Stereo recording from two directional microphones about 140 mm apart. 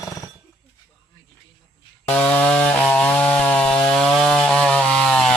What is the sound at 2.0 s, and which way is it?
Chainsaw, 10° left (ahead or behind).